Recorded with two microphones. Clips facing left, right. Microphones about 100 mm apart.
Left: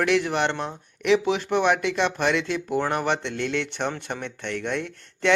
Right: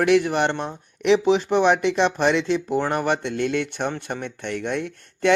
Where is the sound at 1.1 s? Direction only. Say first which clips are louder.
Right 3 dB; 25° right (ahead or behind).